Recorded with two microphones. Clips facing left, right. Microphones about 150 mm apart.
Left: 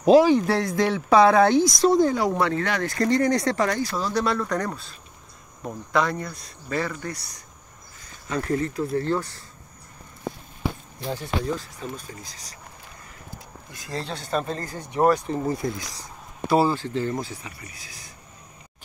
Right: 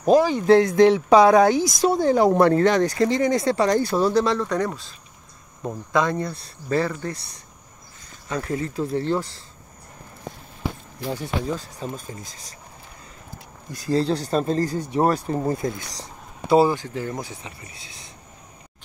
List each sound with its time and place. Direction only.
0.0 s speech: 10° left (ahead or behind)
0.7 s speech: 20° right (ahead or behind)
2.0 s speech: 25° right (ahead or behind)
2.3 s speech: 45° right (ahead or behind)
2.6 s speech: 20° right (ahead or behind)
3.2 s speech: 5° right (ahead or behind)
3.5 s speech: 25° right (ahead or behind)
8.3 s speech: 10° right (ahead or behind)
8.7 s speech: 20° right (ahead or behind)
11.1 s speech: 10° right (ahead or behind)
13.7 s speech: 35° right (ahead or behind)
16.4 s speech: 15° right (ahead or behind)